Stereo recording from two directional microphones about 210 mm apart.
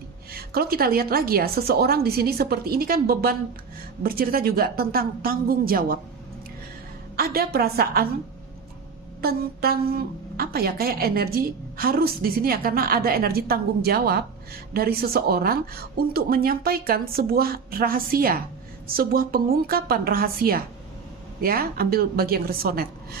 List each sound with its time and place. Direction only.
0.3 s a woman's voice: 45° right (ahead or behind)
7.2 s a woman's voice: 45° right (ahead or behind)
9.2 s a woman's voice: 45° right (ahead or behind)